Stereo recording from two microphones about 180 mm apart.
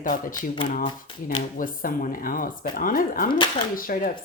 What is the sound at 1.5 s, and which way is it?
Speech, 50° left (ahead or behind).